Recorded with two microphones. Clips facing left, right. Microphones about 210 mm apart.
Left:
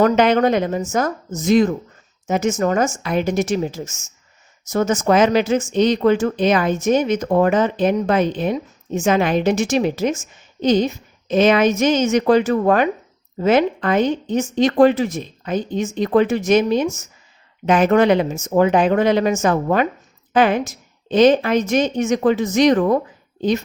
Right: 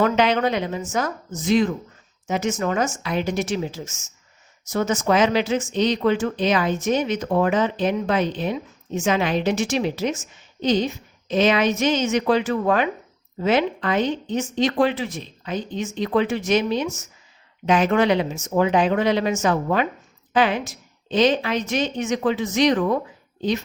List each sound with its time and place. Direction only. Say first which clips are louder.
0.0 s speech: left 5 dB; 45° left (ahead or behind)